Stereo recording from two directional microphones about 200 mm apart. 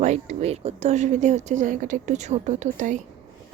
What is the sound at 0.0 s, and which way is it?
Speech, 35° right (ahead or behind).